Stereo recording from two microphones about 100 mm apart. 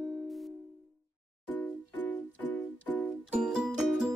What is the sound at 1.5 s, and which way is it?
Music, 15° left (ahead or behind).